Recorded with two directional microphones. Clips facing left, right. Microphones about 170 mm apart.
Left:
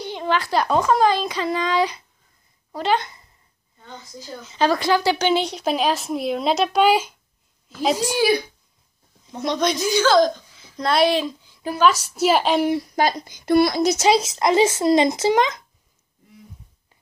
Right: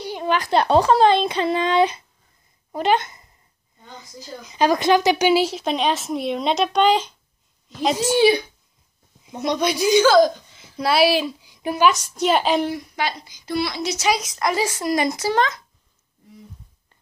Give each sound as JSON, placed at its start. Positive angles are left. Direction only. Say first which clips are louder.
{"t": 0.0, "sound": "speech", "louder": "even", "side_deg": -10}
{"t": 4.4, "sound": "a woman's voice", "louder": "right 1 dB", "side_deg": -15}
{"t": 5.3, "sound": "speech", "louder": "right 2 dB", "side_deg": -5}
{"t": 8.0, "sound": "speech", "louder": "right 6 dB", "side_deg": -25}
{"t": 9.5, "sound": "a woman's voice", "louder": "right 3 dB", "side_deg": -10}
{"t": 11.9, "sound": "speech", "louder": "left 1 dB", "side_deg": 5}
{"t": 12.9, "sound": "a woman's voice", "louder": "left 5 dB", "side_deg": 40}
{"t": 14.0, "sound": "a child's voice", "louder": "left 1 dB", "side_deg": 25}